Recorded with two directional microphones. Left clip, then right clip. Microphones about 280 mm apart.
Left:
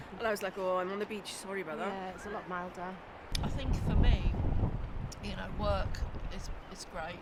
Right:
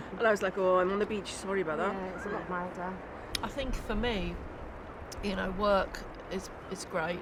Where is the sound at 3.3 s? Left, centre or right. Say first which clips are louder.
Right 4 dB; right.